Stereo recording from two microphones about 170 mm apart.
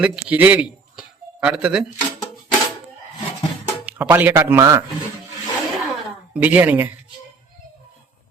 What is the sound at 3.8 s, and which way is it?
Speech, 10° right (ahead or behind).